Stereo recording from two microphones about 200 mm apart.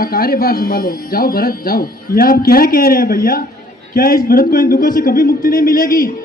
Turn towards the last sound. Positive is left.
turn(degrees=45)  # may be behind; listen again after turning